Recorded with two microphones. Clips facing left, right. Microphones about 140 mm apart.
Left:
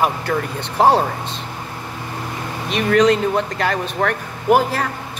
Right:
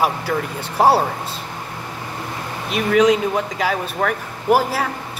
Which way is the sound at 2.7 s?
10° right (ahead or behind).